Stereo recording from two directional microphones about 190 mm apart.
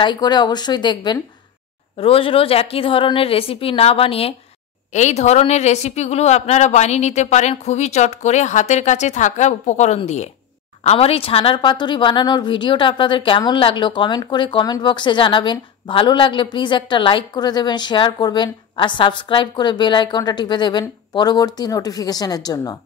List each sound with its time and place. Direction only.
0.0 s a woman's voice: 25° left (ahead or behind)